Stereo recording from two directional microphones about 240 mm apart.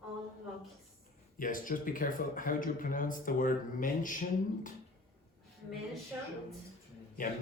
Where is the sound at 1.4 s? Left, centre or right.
Left.